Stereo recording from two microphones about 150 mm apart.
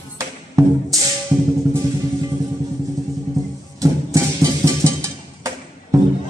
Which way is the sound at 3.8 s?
20° right (ahead or behind).